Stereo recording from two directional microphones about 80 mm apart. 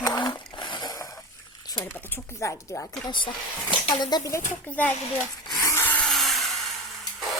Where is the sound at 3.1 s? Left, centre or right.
Left.